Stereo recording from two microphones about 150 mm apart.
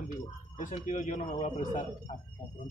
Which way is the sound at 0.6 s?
55° left (ahead or behind).